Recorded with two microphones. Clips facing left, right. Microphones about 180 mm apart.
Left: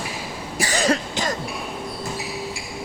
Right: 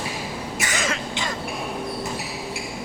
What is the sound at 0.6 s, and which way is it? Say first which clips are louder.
Cough: left 8 dB; 35° left (ahead or behind).